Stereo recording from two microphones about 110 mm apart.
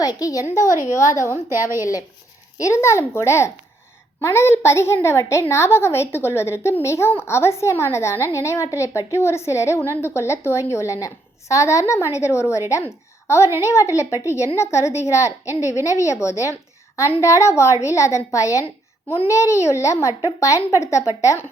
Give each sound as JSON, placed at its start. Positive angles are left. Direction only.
{"t": 0.0, "sound": "a woman's voice", "side_deg": 35}
{"t": 1.5, "sound": "a woman's voice", "side_deg": -25}
{"t": 2.6, "sound": "a woman's voice", "side_deg": 25}